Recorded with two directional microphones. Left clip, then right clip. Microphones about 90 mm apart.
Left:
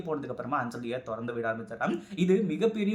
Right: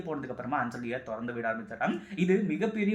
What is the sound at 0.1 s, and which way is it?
Speech, 30° left (ahead or behind).